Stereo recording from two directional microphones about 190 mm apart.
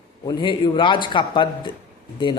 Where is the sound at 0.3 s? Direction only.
25° left (ahead or behind).